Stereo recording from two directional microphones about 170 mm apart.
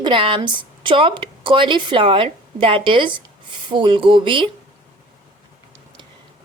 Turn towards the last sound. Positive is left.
turn(degrees=-30)  # may be behind; listen again after turning